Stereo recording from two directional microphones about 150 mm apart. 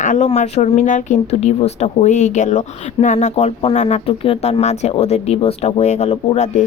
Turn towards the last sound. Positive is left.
turn(degrees=50)  # may be behind; listen again after turning